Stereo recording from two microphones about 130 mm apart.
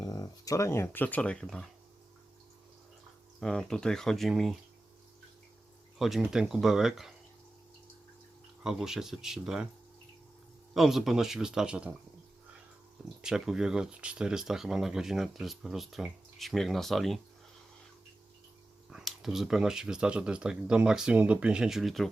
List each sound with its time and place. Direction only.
0.0 s speech: 30° left (ahead or behind); by 1.6 s 5° left (ahead or behind)
3.4 s speech: 5° left (ahead or behind)
6.0 s speech: centre (ahead or behind)
8.6 s speech: 5° right (ahead or behind)
10.8 s speech: centre (ahead or behind)
13.2 s speech: 5° right (ahead or behind)
18.9 s speech: 5° right (ahead or behind)